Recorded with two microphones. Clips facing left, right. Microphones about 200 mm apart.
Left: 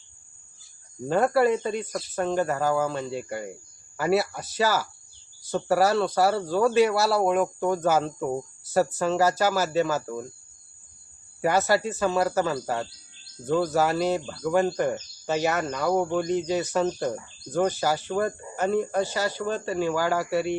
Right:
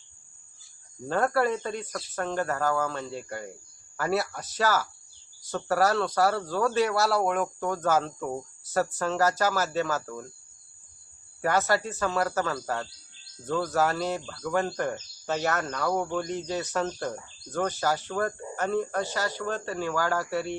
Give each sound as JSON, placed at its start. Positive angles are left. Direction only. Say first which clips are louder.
{"t": 1.0, "sound": "speech", "louder": "left 4 dB", "side_deg": 10}
{"t": 1.5, "sound": "speech", "louder": "left 5 dB", "side_deg": 20}
{"t": 7.2, "sound": "speech", "louder": "left 4 dB", "side_deg": 20}
{"t": 11.6, "sound": "speech", "louder": "left 3 dB", "side_deg": 10}
{"t": 12.0, "sound": "speech", "louder": "left 4 dB", "side_deg": 20}
{"t": 13.9, "sound": "speech", "louder": "left 5 dB", "side_deg": 20}